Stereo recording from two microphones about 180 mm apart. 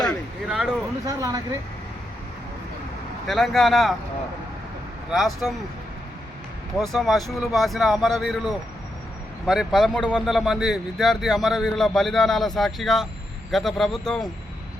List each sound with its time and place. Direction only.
0.0 s a sound: centre (ahead or behind)
1.0 s speech: 20° right (ahead or behind)
3.2 s speech: centre (ahead or behind)
5.1 s speech: centre (ahead or behind)
6.9 s speech: centre (ahead or behind)